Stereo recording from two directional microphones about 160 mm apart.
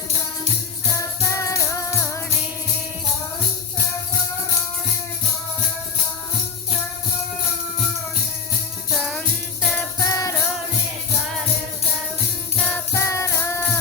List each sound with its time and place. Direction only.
1.2 s music: 20° left (ahead or behind)
9.0 s music: centre (ahead or behind)
10.0 s music: 20° left (ahead or behind)
12.5 s music: 10° left (ahead or behind)